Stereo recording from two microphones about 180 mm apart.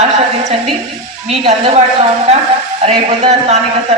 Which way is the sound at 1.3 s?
35° right (ahead or behind).